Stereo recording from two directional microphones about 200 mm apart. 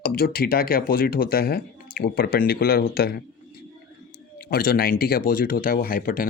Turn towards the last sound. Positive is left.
turn(degrees=45)  # may be behind; listen again after turning